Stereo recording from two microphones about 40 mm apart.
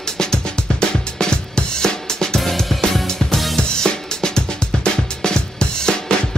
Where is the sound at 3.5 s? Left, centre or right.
Centre.